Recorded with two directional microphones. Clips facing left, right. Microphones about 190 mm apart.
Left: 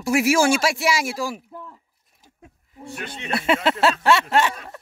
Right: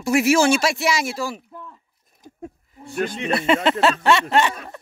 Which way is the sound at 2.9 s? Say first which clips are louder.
Right 10 dB; 40° right (ahead or behind).